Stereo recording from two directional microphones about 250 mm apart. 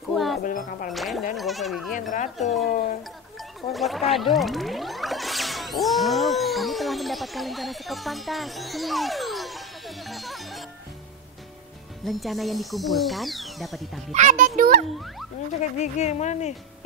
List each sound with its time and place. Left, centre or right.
0.1 s a sound: centre
0.4 s speech: left
0.9 s speech: centre
2.0 s speech: left
3.7 s music: centre
12.0 s speech: centre
14.1 s a child's voice: right
15.8 s speech: left